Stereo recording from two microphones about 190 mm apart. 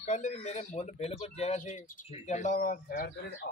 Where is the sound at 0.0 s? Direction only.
40° left (ahead or behind).